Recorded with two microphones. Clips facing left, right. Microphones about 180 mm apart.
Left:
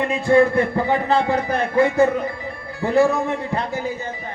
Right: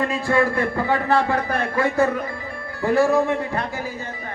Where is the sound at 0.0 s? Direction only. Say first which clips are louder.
Left 4 dB; 20° left (ahead or behind).